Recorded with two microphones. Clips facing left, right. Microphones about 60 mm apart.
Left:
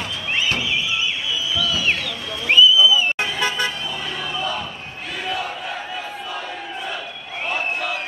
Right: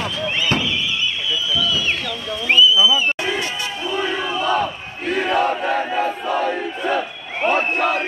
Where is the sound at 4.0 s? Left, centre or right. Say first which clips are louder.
Right 7 dB; right.